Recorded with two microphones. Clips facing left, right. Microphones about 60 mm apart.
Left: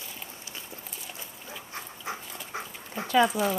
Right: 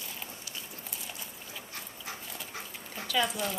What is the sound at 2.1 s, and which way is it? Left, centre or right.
Dog, left.